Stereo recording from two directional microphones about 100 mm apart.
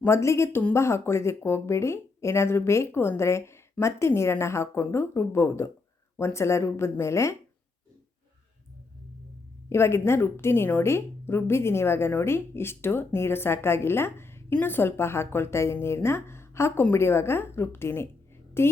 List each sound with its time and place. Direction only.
0.0 s a woman's voice: 25° left (ahead or behind)
9.6 s a woman's voice: 25° left (ahead or behind)